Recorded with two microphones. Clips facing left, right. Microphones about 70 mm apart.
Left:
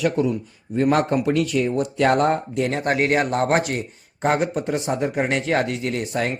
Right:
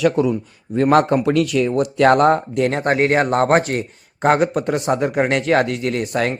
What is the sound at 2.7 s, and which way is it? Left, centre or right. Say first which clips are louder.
Speech: right 3 dB; right.